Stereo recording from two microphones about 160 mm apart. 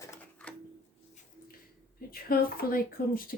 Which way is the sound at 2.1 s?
70° left (ahead or behind).